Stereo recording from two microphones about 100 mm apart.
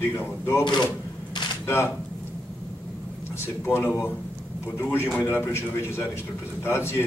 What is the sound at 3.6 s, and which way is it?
Speech, 20° left (ahead or behind).